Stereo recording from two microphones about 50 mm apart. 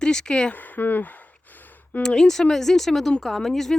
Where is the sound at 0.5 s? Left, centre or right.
Left.